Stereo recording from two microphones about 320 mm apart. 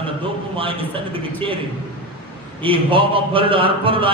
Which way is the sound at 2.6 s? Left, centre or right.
Centre.